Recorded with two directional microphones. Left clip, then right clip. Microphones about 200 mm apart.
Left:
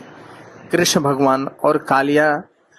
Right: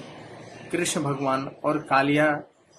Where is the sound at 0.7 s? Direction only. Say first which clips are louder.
Left 10 dB; 45° left (ahead or behind).